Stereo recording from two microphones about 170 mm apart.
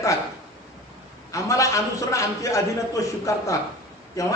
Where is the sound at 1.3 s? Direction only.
20° left (ahead or behind).